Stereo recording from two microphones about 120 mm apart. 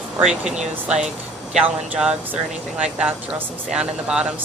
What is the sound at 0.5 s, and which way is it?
Speech, 70° right (ahead or behind).